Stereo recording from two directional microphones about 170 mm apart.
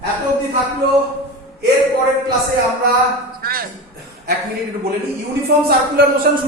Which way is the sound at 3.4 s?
60° right (ahead or behind).